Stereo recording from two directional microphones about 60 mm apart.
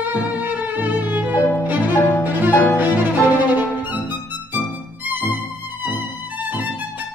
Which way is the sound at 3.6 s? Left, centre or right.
Right.